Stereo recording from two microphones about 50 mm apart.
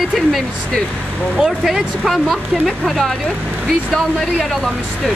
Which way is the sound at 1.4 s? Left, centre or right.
Centre.